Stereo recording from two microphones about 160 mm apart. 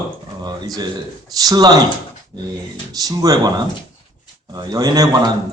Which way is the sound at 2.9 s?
25° right (ahead or behind).